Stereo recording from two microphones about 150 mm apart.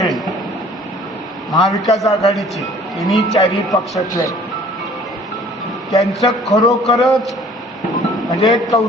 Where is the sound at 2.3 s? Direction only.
Centre (ahead or behind).